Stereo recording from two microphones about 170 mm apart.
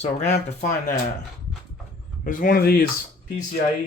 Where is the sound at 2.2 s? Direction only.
55° left (ahead or behind).